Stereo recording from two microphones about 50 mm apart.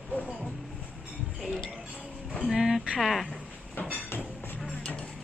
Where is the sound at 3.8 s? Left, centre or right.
Left.